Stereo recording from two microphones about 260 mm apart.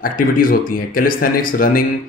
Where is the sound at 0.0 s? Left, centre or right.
Left.